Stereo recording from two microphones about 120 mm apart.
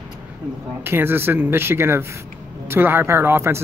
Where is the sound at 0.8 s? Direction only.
20° right (ahead or behind).